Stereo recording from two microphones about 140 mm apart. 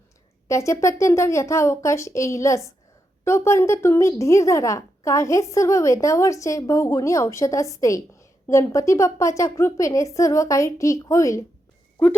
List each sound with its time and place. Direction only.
0.4 s speech: 20° left (ahead or behind)